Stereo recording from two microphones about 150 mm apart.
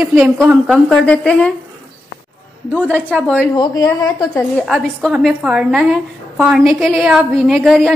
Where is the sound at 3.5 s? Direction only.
25° left (ahead or behind).